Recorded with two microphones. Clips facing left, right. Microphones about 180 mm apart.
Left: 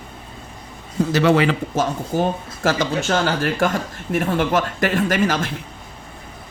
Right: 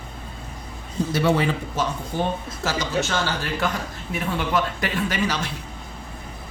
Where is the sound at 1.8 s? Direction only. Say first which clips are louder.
Left 5 dB; 45° left (ahead or behind).